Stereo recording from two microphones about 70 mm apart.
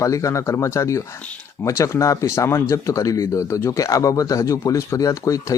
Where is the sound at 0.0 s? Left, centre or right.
Left.